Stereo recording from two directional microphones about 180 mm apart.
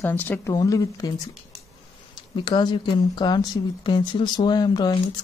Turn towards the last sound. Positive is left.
turn(degrees=25)  # may be behind; listen again after turning